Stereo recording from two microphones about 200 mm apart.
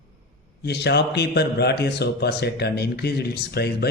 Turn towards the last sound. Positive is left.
turn(degrees=55)  # may be behind; listen again after turning